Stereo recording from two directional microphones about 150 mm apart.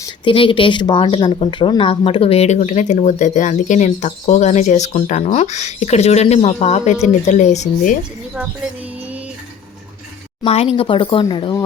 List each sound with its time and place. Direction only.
0.3 s speech: 35° left (ahead or behind); by 7.9 s 50° left (ahead or behind)
10.4 s speech: 40° left (ahead or behind)